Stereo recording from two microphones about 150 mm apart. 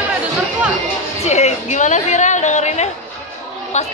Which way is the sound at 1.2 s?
45° left (ahead or behind).